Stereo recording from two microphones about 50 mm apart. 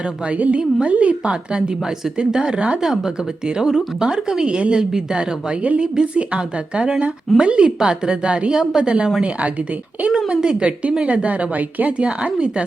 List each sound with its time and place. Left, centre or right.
0.3 s speech: right
2.8 s speech: centre